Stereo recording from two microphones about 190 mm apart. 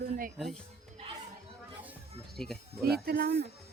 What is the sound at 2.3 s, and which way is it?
Speech, 5° left (ahead or behind).